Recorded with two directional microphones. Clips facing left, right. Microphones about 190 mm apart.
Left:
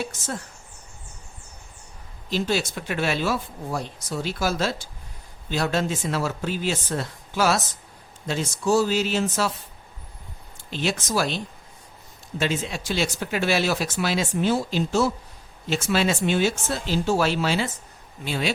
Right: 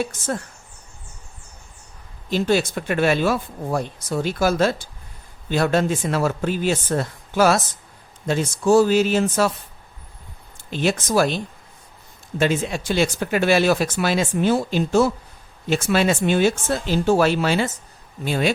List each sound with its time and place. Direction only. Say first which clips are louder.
0.0 s speech: right 6 dB; 55° right (ahead or behind)
2.3 s speech: right 5 dB; 55° right (ahead or behind)
10.7 s speech: right 5 dB; 50° right (ahead or behind)
12.4 s speech: right 5 dB; 55° right (ahead or behind)